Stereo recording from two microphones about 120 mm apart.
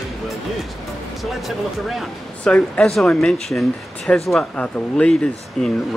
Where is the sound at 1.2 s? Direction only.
Centre (ahead or behind).